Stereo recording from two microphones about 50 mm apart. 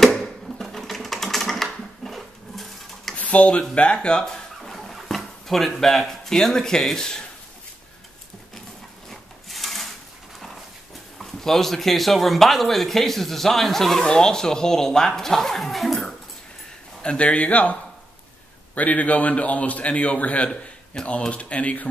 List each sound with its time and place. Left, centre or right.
0.0 s typing: centre
3.2 s a man's voice: left
4.6 s a sound: centre
5.8 s speech: centre
9.1 s rub: centre
11.1 s a man's voice: centre
17.0 s a man's voice: left
18.8 s a man's voice: left